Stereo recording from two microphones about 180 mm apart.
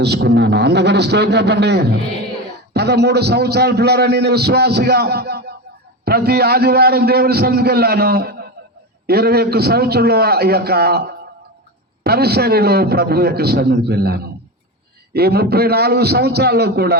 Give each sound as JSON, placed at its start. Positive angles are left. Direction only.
{"t": 0.0, "sound": "a man's voice", "side_deg": -65}